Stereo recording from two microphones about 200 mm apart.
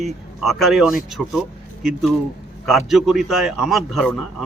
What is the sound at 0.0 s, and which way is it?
A man's voice, centre (ahead or behind).